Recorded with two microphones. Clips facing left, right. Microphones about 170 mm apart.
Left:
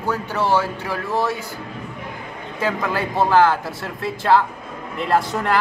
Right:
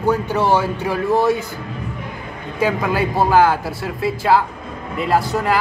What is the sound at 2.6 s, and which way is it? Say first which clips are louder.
A woman's voice: right 4 dB; 10° right (ahead or behind).